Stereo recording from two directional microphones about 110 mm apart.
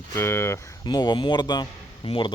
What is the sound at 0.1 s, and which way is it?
Speech, 20° left (ahead or behind).